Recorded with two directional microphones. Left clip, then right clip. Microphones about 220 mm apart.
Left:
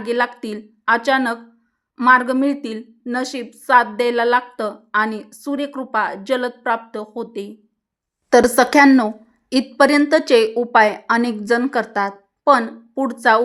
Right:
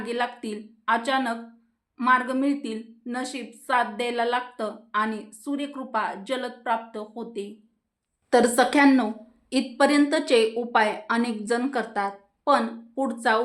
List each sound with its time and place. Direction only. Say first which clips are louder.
0.0 s a woman's voice: left 8 dB; 45° left (ahead or behind)